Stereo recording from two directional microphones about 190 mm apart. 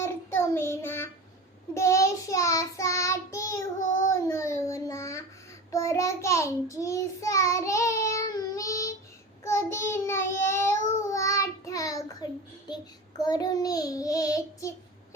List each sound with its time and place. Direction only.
0.3 s child singing: 10° left (ahead or behind)